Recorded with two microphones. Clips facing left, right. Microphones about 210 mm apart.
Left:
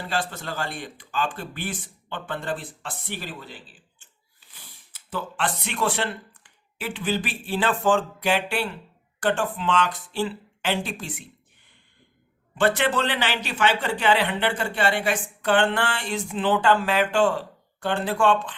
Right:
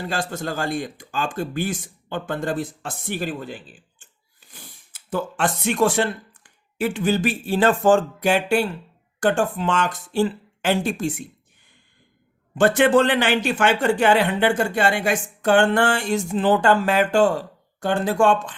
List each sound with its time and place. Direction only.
0.1 s speech: 45° right (ahead or behind)
12.5 s speech: 45° right (ahead or behind)